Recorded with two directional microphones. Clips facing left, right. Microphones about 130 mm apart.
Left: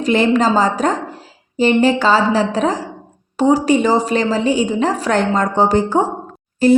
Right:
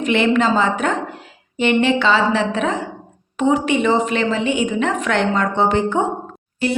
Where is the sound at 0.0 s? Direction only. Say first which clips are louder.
Left 2 dB; 35° left (ahead or behind).